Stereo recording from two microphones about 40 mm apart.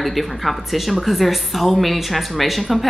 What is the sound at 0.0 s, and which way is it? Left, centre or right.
Speech, centre.